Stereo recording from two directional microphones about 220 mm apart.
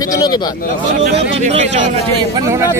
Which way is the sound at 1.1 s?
30° right (ahead or behind).